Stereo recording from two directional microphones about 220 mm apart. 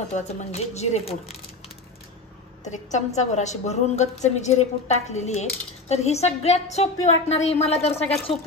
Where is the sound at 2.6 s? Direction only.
35° left (ahead or behind).